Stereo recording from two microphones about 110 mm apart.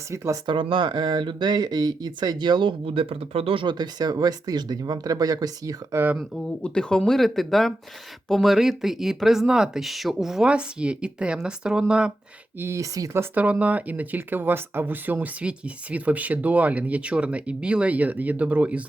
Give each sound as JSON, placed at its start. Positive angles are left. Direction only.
{"t": 0.4, "sound": "speech", "side_deg": -50}
{"t": 6.6, "sound": "speech", "side_deg": 5}
{"t": 12.5, "sound": "speech", "side_deg": -25}
{"t": 13.3, "sound": "speech", "side_deg": -15}